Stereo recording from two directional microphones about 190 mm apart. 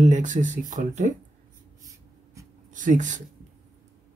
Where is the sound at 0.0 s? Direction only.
40° right (ahead or behind).